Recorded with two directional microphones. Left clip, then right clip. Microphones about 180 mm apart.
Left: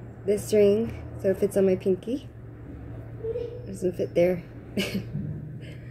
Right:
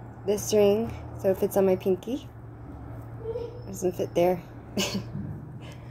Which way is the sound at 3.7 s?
20° left (ahead or behind).